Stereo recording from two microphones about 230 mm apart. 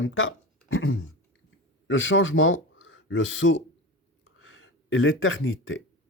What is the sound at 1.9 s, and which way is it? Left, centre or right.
Speech, left.